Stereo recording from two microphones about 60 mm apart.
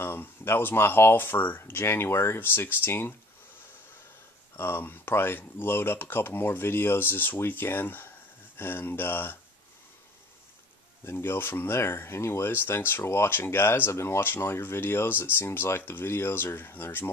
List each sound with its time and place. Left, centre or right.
0.0 s speech: left
4.6 s speech: left
11.1 s speech: left